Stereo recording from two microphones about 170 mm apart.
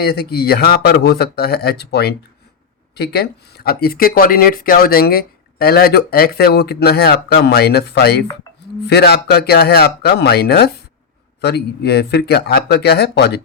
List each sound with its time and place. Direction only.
0.0 s speech: 65° left (ahead or behind)